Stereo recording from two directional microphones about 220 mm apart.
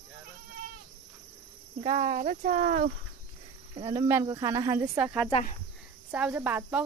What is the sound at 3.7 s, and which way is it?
Speech, 20° right (ahead or behind).